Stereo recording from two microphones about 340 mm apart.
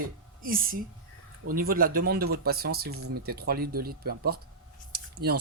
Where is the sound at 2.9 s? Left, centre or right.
Right.